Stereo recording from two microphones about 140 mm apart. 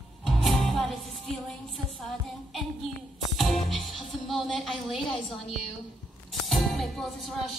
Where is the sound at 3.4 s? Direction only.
Centre (ahead or behind).